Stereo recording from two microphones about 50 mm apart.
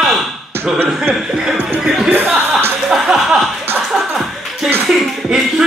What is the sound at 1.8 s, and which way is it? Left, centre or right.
Music, centre.